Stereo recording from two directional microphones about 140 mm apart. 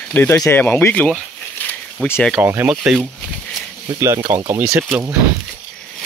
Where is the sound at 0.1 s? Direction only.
15° left (ahead or behind).